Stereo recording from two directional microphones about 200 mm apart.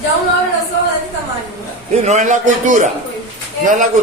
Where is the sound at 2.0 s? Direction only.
35° right (ahead or behind).